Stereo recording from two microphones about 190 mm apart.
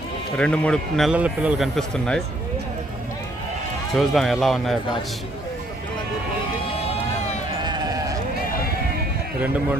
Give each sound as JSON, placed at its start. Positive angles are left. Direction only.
{"t": 0.3, "sound": "a man's voice", "side_deg": 5}
{"t": 3.9, "sound": "a man's voice", "side_deg": 0}
{"t": 7.6, "sound": "bleat", "side_deg": -20}